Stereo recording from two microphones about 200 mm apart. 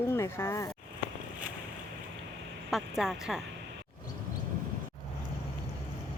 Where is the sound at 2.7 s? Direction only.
Centre (ahead or behind).